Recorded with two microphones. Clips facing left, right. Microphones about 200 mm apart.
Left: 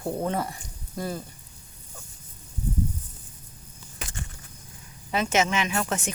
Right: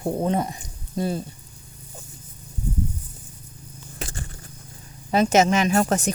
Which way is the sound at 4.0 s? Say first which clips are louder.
Right 4 dB; 35° right (ahead or behind).